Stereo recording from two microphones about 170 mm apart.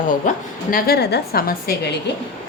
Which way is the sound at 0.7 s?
60° left (ahead or behind).